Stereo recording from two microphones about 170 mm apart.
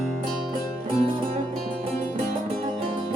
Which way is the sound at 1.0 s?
35° right (ahead or behind).